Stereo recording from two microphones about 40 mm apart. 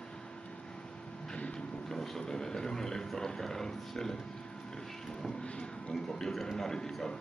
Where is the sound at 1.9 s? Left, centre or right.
Centre.